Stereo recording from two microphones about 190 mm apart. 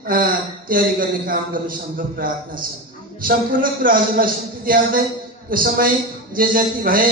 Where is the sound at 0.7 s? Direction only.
50° right (ahead or behind).